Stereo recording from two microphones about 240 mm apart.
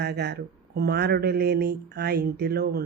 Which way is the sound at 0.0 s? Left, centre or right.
Right.